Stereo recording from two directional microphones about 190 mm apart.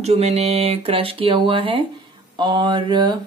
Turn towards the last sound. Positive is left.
turn(degrees=-25)  # may be behind; listen again after turning